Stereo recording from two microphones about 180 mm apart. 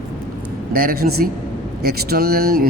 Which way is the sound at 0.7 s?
55° right (ahead or behind).